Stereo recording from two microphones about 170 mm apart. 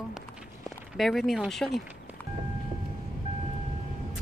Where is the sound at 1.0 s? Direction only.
Centre (ahead or behind).